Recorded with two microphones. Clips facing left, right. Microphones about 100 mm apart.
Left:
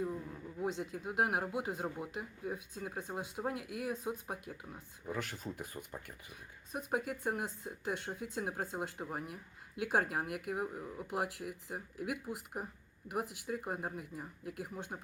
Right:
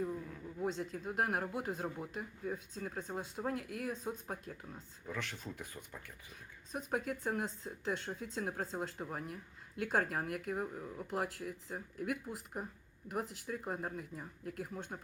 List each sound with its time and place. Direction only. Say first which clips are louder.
0.4 s speech: even; 10° left (ahead or behind)
5.1 s speech: left 2 dB; 40° left (ahead or behind)
6.7 s speech: left 1 dB; 5° left (ahead or behind)